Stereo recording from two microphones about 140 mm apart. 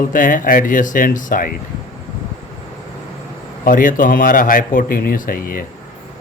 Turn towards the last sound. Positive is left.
turn(degrees=90)